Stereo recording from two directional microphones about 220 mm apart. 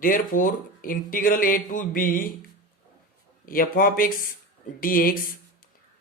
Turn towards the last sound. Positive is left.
turn(degrees=40)  # may be behind; listen again after turning